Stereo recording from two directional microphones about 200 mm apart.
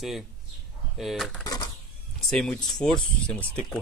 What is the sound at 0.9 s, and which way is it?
Speech, centre (ahead or behind).